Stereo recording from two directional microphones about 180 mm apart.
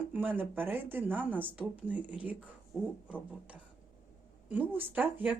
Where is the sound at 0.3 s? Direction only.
10° right (ahead or behind).